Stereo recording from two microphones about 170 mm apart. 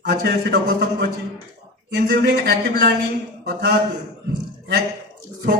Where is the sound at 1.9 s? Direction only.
85° right.